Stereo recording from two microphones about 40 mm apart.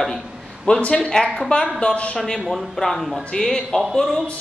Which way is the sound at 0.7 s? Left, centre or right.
Left.